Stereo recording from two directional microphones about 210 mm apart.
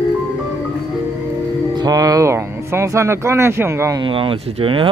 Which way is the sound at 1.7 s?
15° right (ahead or behind).